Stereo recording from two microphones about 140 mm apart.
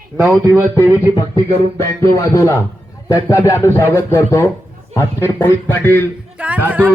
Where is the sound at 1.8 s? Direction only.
20° left (ahead or behind).